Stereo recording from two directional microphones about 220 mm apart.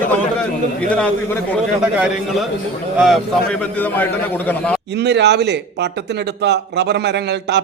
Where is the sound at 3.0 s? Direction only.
Centre (ahead or behind).